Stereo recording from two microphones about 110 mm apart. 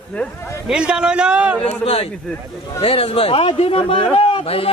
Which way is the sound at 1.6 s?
65° left (ahead or behind).